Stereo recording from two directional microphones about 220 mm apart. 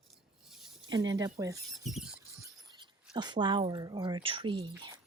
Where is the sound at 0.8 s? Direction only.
20° right (ahead or behind).